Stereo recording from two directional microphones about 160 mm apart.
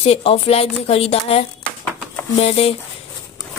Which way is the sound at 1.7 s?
5° left (ahead or behind).